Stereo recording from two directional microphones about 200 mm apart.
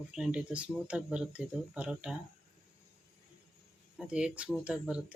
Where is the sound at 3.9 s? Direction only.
5° right (ahead or behind).